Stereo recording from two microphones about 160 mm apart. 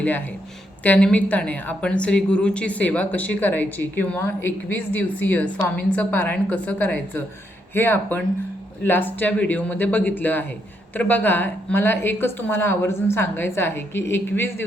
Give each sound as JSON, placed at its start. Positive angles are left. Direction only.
{"t": 0.9, "sound": "a woman's voice", "side_deg": 10}